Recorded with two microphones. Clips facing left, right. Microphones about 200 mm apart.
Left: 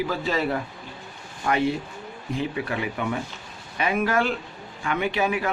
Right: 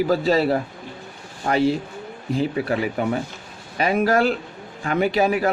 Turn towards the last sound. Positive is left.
turn(degrees=-40)  # may be behind; listen again after turning